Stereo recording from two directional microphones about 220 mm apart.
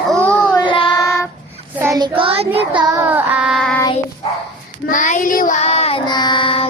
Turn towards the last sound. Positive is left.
turn(degrees=25)  # may be behind; listen again after turning